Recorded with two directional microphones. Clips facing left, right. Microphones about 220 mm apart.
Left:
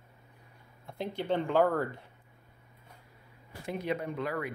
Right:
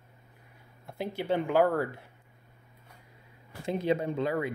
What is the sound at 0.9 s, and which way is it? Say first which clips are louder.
Speech: right 2 dB; 5° right (ahead or behind).